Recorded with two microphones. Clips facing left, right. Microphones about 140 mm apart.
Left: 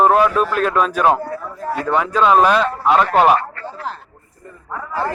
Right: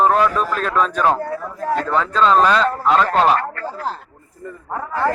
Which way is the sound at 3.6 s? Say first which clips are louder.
Right 3 dB; 35° right (ahead or behind).